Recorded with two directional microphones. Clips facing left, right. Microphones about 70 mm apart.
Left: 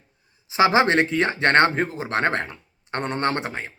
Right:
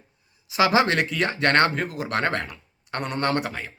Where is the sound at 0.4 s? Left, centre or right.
Left.